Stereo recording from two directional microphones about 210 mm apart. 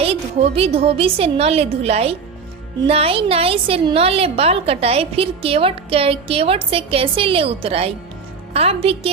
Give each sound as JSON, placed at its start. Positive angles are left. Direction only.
{"t": 0.0, "sound": "a woman's voice", "side_deg": -30}